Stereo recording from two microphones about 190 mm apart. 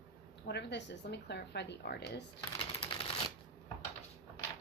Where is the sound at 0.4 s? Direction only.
65° left (ahead or behind).